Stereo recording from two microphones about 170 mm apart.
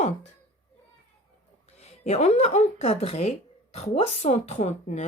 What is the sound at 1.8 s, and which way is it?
Speech, 40° left (ahead or behind).